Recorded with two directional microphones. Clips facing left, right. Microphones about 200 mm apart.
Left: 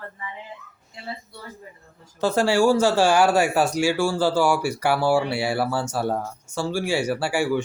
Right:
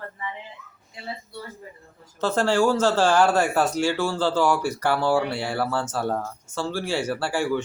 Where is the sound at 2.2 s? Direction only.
10° left (ahead or behind).